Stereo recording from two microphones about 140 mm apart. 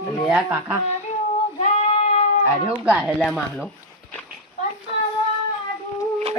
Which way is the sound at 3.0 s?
5° left (ahead or behind).